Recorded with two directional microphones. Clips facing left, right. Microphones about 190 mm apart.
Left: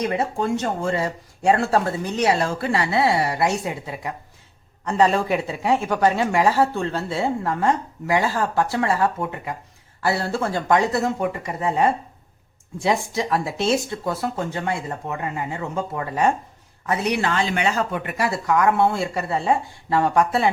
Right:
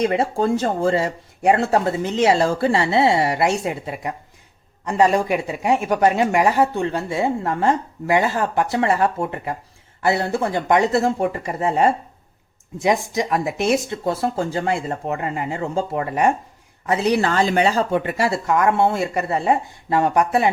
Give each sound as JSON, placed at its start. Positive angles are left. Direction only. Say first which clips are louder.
{"t": 0.0, "sound": "speech", "louder": "right 4 dB", "side_deg": -30}
{"t": 4.9, "sound": "speech", "louder": "right 2 dB", "side_deg": -15}